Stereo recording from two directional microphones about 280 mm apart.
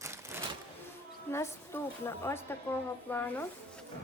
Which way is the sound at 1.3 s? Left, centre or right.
Centre.